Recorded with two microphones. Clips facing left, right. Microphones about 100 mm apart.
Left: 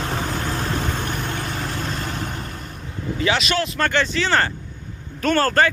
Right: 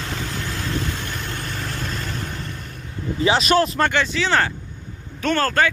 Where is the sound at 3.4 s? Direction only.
40° right (ahead or behind).